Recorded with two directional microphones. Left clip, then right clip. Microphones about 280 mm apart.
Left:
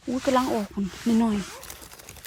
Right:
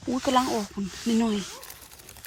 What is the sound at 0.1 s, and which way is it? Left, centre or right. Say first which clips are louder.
Speech: even; centre.